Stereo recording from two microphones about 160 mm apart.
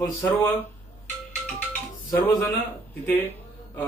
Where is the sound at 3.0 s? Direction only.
10° left (ahead or behind).